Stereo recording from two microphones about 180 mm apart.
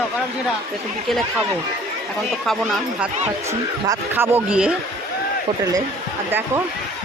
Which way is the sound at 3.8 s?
15° right (ahead or behind).